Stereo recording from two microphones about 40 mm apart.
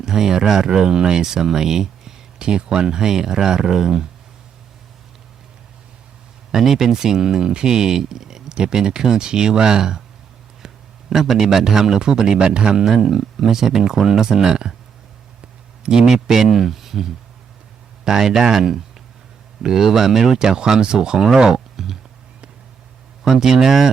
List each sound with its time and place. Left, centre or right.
0.0 s speech: centre
6.6 s speech: centre
11.1 s speech: centre
15.8 s a man's voice: right
21.3 s a sound: centre
23.2 s speech: centre